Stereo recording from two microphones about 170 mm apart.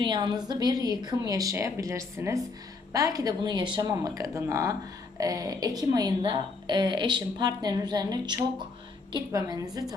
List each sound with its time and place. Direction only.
0.0 s speech: 25° right (ahead or behind)